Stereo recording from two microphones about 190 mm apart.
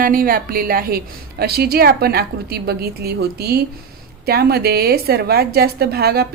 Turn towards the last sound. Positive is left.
turn(degrees=-55)  # may be behind; listen again after turning